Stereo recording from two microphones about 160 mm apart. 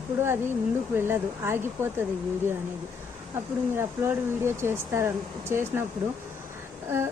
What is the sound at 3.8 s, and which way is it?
Speech, 15° right (ahead or behind).